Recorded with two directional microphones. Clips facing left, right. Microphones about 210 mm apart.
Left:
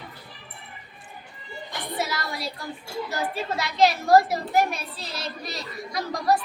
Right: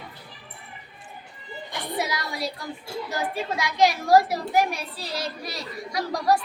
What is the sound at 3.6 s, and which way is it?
A child's voice, 15° right (ahead or behind).